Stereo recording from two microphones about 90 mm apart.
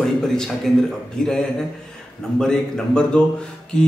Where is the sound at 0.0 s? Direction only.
5° left (ahead or behind).